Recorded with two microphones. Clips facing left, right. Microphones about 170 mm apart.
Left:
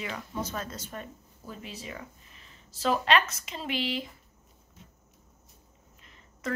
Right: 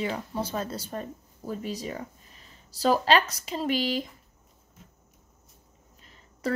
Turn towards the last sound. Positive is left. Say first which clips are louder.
# right 4 dB
turn(degrees=-35)  # may be behind; listen again after turning